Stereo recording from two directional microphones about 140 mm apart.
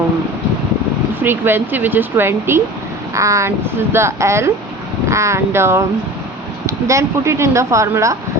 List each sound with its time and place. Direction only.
1.2 s speech: 15° right (ahead or behind)